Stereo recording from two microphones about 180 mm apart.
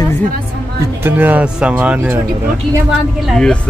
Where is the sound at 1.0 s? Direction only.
10° right (ahead or behind).